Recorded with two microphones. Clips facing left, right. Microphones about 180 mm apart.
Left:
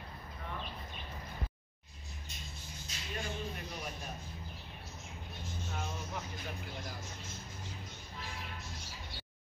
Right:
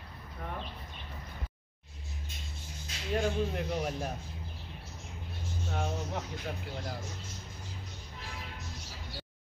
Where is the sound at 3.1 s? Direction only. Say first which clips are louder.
Right 10 dB; 90° right.